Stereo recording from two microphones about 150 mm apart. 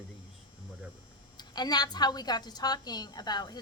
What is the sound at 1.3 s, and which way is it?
A woman's voice, 30° left (ahead or behind).